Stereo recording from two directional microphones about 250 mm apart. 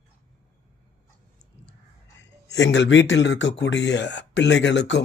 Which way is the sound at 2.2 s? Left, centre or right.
Left.